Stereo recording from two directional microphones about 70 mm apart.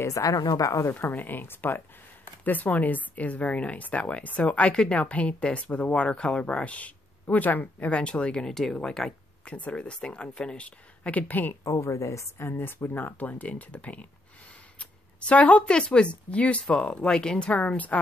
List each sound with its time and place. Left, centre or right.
0.0 s a woman's voice: left
0.4 s a woman's voice: left
0.9 s speech: left; by 9.5 s centre
9.5 s speech: centre
11.6 s a woman's voice: left
12.4 s speech: left